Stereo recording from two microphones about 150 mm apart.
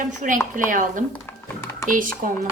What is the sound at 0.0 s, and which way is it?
A woman's voice, 55° right (ahead or behind).